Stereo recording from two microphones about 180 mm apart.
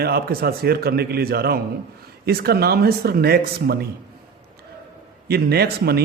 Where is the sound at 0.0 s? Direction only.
60° right (ahead or behind).